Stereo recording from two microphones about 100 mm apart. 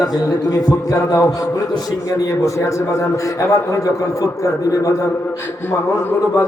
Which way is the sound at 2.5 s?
30° left (ahead or behind).